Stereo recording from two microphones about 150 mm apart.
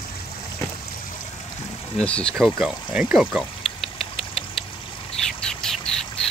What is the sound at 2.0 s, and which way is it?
Speech, 5° left (ahead or behind).